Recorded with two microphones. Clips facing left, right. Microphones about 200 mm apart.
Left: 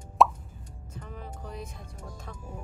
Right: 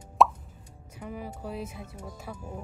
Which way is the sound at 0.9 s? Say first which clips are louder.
Right 5 dB; 10° right (ahead or behind).